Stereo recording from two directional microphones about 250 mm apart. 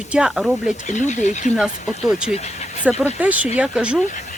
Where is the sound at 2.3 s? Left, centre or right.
Left.